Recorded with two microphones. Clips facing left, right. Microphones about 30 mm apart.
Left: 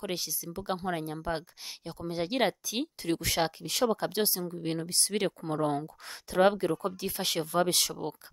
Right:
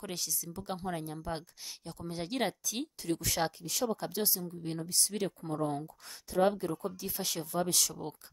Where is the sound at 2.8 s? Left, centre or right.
Left.